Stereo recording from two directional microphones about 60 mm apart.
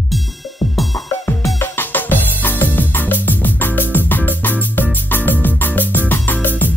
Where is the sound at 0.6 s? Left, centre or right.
Left.